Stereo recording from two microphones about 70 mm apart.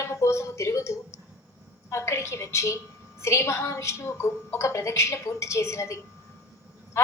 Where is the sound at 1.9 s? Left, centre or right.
Left.